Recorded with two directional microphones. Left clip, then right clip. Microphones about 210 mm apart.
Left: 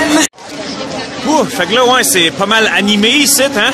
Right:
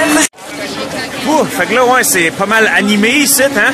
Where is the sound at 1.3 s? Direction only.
10° left (ahead or behind).